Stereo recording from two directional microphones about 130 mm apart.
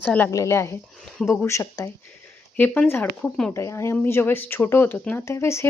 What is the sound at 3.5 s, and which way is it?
Speech, 20° left (ahead or behind).